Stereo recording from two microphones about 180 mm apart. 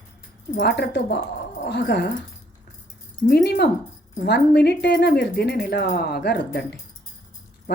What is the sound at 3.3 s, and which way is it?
Speech, 60° left (ahead or behind).